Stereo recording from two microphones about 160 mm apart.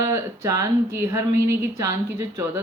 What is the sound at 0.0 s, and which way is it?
Speech, 20° right (ahead or behind).